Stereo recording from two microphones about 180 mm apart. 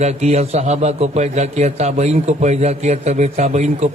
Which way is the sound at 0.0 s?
40° right (ahead or behind).